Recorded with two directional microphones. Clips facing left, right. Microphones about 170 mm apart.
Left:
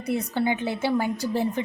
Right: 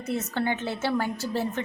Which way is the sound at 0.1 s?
15° left (ahead or behind).